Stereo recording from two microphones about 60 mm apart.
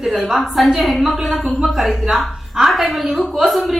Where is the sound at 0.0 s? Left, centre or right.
Centre.